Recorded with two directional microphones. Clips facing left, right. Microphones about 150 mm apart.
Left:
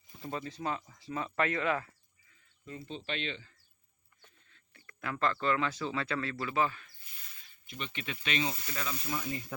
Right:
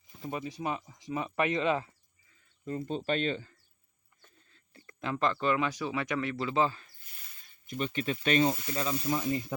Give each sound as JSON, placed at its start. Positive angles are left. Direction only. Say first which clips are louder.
{"t": 0.2, "sound": "speech", "louder": "right 2 dB", "side_deg": -15}
{"t": 2.6, "sound": "speech", "louder": "right 9 dB", "side_deg": -45}
{"t": 4.4, "sound": "speech", "louder": "right 5 dB", "side_deg": -35}
{"t": 7.7, "sound": "speech", "louder": "right 9 dB", "side_deg": -40}
{"t": 8.6, "sound": "speech", "louder": "right 7 dB", "side_deg": -30}